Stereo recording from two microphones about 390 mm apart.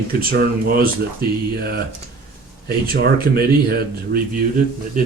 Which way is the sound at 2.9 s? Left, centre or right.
Right.